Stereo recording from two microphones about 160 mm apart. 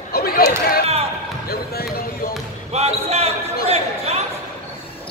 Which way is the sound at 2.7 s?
40° right (ahead or behind).